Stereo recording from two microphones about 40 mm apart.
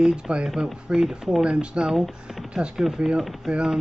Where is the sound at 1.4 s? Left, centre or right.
Right.